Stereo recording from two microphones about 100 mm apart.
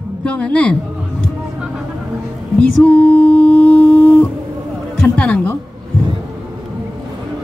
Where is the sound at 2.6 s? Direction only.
15° left (ahead or behind).